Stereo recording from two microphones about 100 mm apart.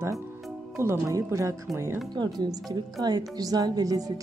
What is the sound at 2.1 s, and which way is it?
Speech, 45° right (ahead or behind).